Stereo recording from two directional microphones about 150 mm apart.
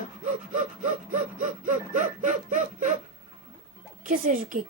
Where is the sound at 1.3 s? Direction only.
60° right (ahead or behind).